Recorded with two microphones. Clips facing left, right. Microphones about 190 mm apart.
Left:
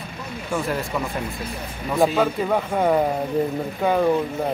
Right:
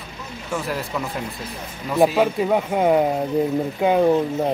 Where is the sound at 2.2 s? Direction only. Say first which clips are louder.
Right 2 dB; 10° right (ahead or behind).